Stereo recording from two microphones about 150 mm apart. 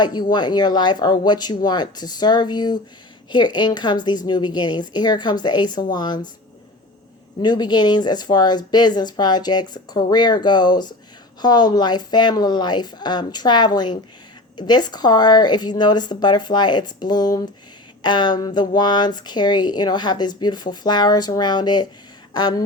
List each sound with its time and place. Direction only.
0.0 s speech: 30° left (ahead or behind)
7.4 s speech: 30° left (ahead or behind)